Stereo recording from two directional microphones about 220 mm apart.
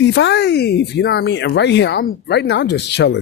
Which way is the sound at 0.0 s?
55° left (ahead or behind).